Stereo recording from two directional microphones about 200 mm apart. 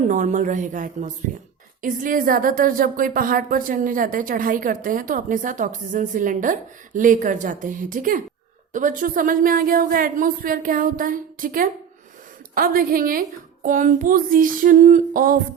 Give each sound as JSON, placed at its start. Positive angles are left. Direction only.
{"t": 0.1, "sound": "a woman's voice", "side_deg": -40}